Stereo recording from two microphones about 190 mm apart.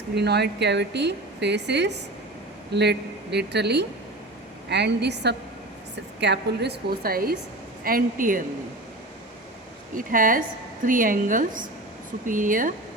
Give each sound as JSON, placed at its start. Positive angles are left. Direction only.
{"t": 0.1, "sound": "a woman's voice", "side_deg": -60}
{"t": 9.9, "sound": "a woman's voice", "side_deg": -45}